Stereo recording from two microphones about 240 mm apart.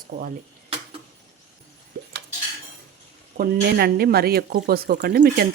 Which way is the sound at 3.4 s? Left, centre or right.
Right.